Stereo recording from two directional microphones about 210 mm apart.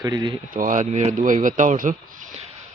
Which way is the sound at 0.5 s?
40° right (ahead or behind).